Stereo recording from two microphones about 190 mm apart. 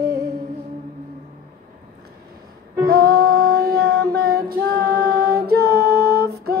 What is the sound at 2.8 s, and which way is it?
Female singing, 55° right (ahead or behind).